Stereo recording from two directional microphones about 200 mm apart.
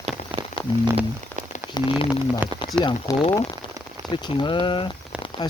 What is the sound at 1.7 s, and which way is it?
Speech, 20° left (ahead or behind).